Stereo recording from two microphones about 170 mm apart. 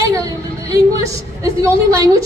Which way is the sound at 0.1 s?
20° right (ahead or behind).